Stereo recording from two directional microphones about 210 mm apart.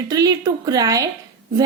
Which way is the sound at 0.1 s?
15° right (ahead or behind).